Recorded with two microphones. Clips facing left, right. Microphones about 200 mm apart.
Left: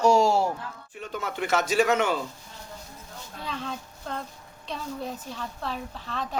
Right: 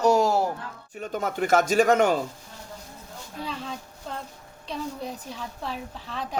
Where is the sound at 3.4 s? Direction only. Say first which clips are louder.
Even; 5° right (ahead or behind).